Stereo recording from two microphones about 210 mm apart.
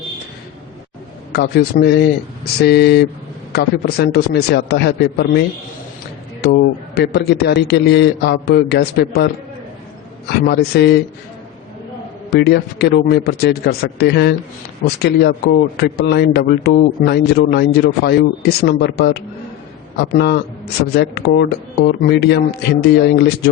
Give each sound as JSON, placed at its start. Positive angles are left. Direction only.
{"t": 1.3, "sound": "a man's voice", "side_deg": 50}
{"t": 6.4, "sound": "a man's voice", "side_deg": 55}
{"t": 10.4, "sound": "a man's voice", "side_deg": 50}
{"t": 12.3, "sound": "a man's voice", "side_deg": 50}